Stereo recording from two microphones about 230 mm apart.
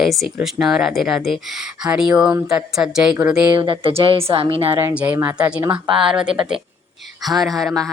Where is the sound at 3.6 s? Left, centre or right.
Right.